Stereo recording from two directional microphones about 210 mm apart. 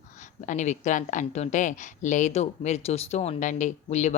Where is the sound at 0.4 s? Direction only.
35° left (ahead or behind).